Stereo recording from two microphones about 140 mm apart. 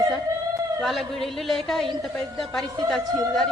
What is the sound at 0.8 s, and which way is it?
A woman's voice, centre (ahead or behind).